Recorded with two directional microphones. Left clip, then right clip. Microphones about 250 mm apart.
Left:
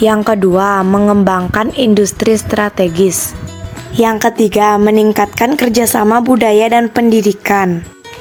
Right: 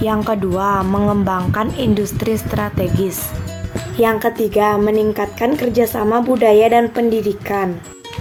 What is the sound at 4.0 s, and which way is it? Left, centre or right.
A woman's voice, left.